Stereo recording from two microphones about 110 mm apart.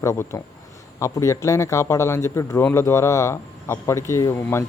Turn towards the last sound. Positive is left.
turn(degrees=25)  # may be behind; listen again after turning